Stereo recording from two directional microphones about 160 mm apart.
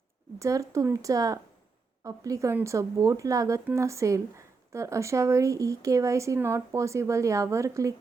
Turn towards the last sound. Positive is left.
turn(degrees=-20)  # may be behind; listen again after turning